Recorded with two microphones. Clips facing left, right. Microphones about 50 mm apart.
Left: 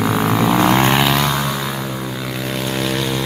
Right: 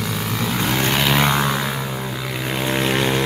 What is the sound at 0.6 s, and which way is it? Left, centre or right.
Vehicle, left.